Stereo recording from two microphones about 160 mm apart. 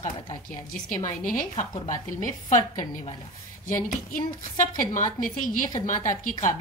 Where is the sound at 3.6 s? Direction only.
55° left (ahead or behind).